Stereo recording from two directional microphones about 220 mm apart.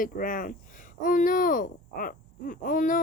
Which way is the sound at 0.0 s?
40° left (ahead or behind).